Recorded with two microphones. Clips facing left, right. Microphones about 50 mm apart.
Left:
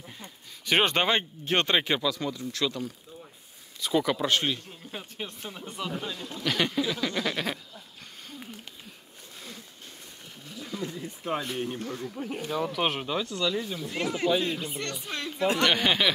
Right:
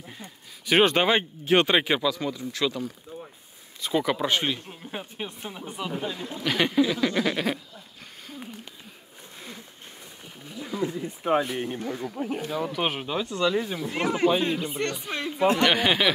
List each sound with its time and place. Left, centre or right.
0.7 s speech: centre
10.2 s wild animals: centre
11.4 s speech: centre
12.4 s speech: centre
13.2 s speech: right
15.4 s speech: centre